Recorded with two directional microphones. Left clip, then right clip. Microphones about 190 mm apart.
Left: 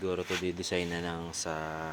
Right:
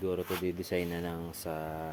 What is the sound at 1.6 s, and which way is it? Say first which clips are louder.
Speech: left 2 dB; 5° right (ahead or behind).